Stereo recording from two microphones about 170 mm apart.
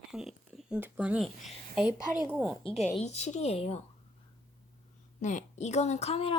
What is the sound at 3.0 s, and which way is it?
Speech, 40° left (ahead or behind).